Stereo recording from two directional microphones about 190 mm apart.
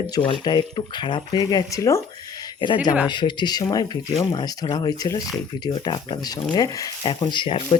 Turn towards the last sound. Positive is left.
turn(degrees=25)  # may be behind; listen again after turning